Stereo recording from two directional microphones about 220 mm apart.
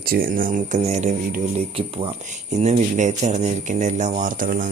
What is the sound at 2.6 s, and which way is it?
Speech, 30° right (ahead or behind).